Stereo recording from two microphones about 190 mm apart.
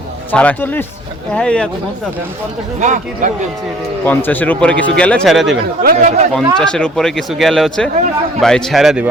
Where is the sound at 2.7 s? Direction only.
40° right (ahead or behind).